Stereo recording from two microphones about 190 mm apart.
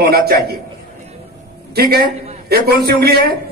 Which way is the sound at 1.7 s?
55° right (ahead or behind).